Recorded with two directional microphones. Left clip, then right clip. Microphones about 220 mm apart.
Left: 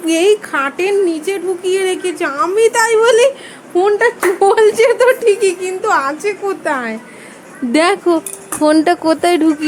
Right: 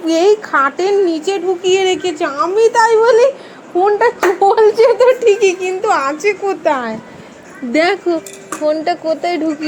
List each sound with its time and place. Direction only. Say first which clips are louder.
0.0 s a woman's voice: right 1 dB; 10° left (ahead or behind)
5.2 s a woman's voice: right 1 dB; centre (ahead or behind)
7.7 s speech: left 1 dB; 20° left (ahead or behind)